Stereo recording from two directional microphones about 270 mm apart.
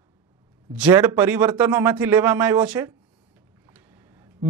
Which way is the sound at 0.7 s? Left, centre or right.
Centre.